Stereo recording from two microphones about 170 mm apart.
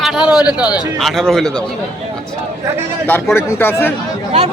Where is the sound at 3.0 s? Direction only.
10° left (ahead or behind).